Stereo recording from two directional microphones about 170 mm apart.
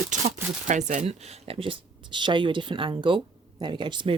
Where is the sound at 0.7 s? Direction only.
45° right (ahead or behind).